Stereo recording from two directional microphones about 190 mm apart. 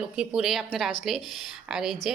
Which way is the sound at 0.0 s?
5° right (ahead or behind).